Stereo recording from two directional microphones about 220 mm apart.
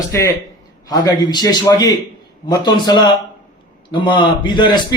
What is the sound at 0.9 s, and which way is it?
A man's voice, 20° left (ahead or behind).